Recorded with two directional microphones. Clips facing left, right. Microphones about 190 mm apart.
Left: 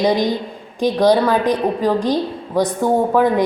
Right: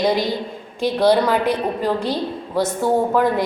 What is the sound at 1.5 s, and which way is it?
A woman's voice, 15° left (ahead or behind).